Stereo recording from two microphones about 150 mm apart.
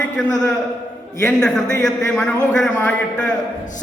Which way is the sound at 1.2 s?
5° left (ahead or behind).